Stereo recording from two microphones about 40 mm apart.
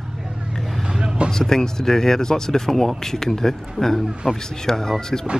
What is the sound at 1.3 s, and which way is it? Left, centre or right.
Speech, centre.